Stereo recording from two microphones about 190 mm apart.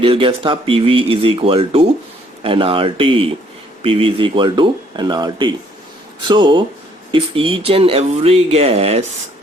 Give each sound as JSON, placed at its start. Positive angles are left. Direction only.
{"t": 0.0, "sound": "speech", "side_deg": -30}